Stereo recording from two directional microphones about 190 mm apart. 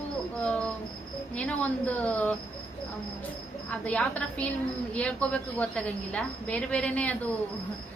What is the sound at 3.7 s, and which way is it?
A woman's voice, 5° left (ahead or behind).